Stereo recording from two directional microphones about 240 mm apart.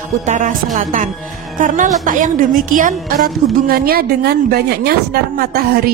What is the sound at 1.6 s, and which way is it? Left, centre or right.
A woman's voice, right.